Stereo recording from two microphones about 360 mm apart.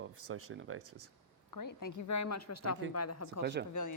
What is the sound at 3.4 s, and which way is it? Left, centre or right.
Speech, right.